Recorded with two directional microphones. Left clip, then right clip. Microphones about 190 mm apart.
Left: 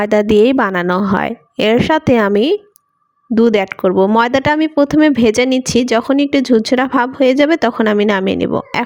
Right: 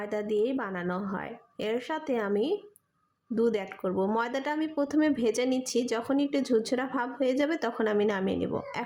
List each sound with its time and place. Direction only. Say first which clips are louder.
0.0 s speech: left 18 dB; 55° left (ahead or behind)